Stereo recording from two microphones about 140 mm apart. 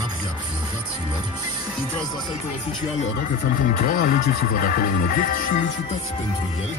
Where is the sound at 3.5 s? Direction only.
75° left (ahead or behind).